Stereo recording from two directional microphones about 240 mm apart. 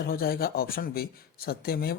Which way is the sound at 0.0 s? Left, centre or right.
Left.